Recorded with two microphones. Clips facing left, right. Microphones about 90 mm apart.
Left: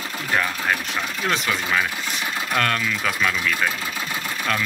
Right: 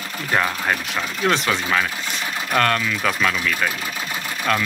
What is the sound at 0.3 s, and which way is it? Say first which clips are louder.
Speech: right 2 dB; 10° right (ahead or behind).